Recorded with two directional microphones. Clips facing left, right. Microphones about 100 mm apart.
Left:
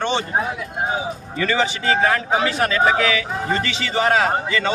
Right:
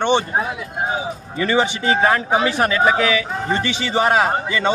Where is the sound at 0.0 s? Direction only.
20° right (ahead or behind).